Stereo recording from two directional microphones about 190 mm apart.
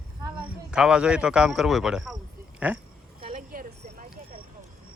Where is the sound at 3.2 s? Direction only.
45° right (ahead or behind).